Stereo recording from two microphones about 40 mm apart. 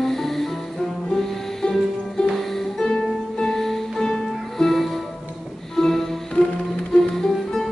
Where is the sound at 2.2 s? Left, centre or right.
Centre.